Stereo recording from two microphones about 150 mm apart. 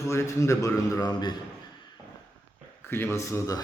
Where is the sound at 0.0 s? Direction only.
20° left (ahead or behind).